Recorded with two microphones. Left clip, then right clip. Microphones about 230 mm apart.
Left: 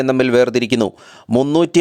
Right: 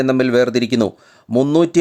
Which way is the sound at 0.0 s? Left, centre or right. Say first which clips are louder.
Left 1 dB; centre.